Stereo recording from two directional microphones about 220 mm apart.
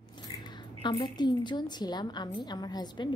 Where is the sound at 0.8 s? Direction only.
20° left (ahead or behind).